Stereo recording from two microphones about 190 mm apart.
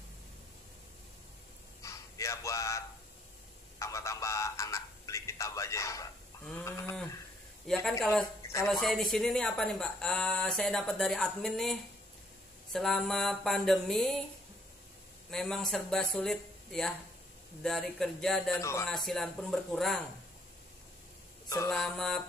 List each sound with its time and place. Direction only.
1.8 s a sound: 15° left (ahead or behind)
3.8 s a sound: 15° left (ahead or behind)
7.6 s speech: centre (ahead or behind)
8.1 s speech: 15° left (ahead or behind)
8.8 s speech: centre (ahead or behind)
15.3 s speech: 5° left (ahead or behind)
18.6 s speech: 15° left (ahead or behind)
18.9 s speech: centre (ahead or behind)
21.6 s speech: 5° left (ahead or behind)